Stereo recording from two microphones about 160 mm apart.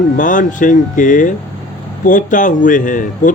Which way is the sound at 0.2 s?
55° left (ahead or behind).